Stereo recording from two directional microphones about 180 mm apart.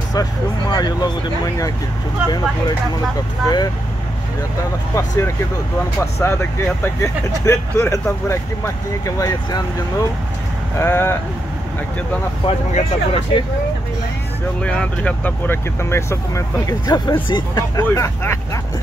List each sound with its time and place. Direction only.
0.1 s speech: 20° left (ahead or behind)
3.4 s speech: 20° left (ahead or behind)
4.9 s speech: 15° left (ahead or behind)
10.8 s speech: 15° left (ahead or behind)
12.4 s speech: 30° left (ahead or behind)
14.6 s speech: 5° left (ahead or behind)